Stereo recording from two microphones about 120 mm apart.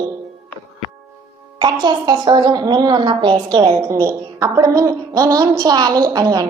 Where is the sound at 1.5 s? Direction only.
35° right (ahead or behind).